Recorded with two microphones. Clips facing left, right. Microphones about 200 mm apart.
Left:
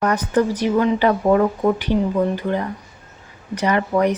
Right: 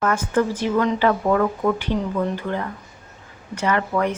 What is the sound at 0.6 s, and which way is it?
Speech, 15° left (ahead or behind).